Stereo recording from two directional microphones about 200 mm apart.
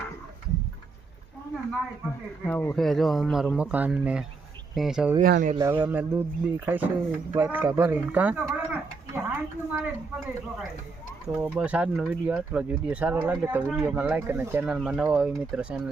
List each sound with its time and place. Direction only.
2.5 s speech: 10° left (ahead or behind)
5.2 s speech: 45° right (ahead or behind)
5.5 s speech: 10° right (ahead or behind)
11.3 s speech: 10° right (ahead or behind)